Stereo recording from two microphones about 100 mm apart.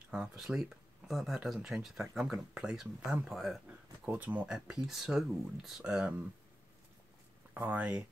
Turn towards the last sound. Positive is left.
turn(degrees=-15)  # may be behind; listen again after turning